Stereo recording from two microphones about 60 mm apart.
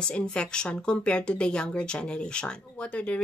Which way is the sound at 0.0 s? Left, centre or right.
Centre.